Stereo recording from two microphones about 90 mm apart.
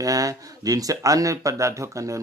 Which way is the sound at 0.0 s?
40° right (ahead or behind).